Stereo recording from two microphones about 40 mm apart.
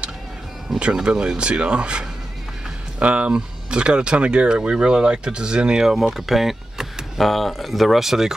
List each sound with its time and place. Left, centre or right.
0.9 s speech: centre
6.1 s power windows: centre
7.2 s speech: centre